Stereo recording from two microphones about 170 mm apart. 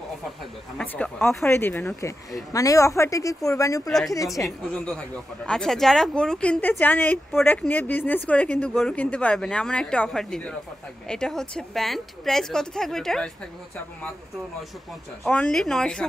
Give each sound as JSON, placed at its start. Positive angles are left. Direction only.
{"t": 0.7, "sound": "speech", "side_deg": 5}
{"t": 4.5, "sound": "speech", "side_deg": 5}
{"t": 15.2, "sound": "speech", "side_deg": 5}